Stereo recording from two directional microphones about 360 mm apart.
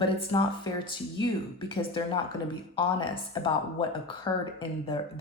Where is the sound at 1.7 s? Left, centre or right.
Centre.